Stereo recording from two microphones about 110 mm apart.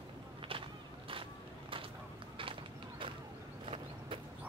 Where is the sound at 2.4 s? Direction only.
50° right (ahead or behind).